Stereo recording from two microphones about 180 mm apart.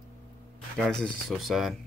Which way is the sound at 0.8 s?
5° left (ahead or behind).